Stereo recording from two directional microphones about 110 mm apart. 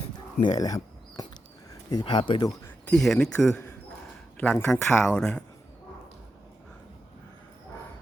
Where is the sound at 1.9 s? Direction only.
45° left (ahead or behind).